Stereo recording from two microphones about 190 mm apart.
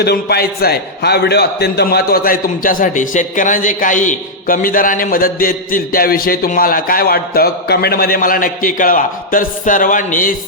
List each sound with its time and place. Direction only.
0.0 s a man's voice: 60° left (ahead or behind)